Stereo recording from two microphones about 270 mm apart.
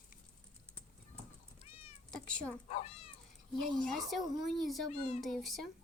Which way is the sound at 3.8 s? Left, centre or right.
Centre.